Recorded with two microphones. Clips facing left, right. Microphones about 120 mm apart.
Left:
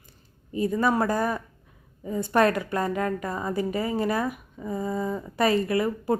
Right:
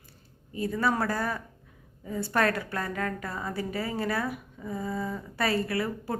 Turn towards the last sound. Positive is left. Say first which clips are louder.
# left 6 dB
turn(degrees=20)  # may be behind; listen again after turning